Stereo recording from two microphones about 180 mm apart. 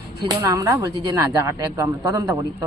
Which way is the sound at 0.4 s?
20° right (ahead or behind).